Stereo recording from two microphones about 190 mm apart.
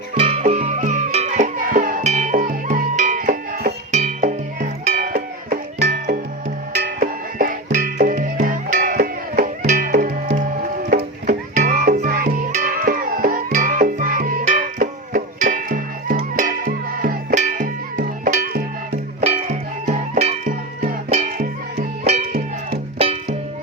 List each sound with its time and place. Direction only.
0.1 s music: 35° right (ahead or behind); by 3.8 s 50° right (ahead or behind)
3.9 s music: 40° right (ahead or behind)
19.2 s music: 35° right (ahead or behind)